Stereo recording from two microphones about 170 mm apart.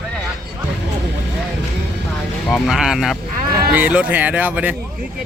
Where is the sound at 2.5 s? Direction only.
Centre (ahead or behind).